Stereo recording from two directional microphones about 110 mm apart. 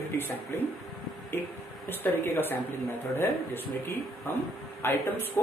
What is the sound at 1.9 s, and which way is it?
Speech, 20° left (ahead or behind).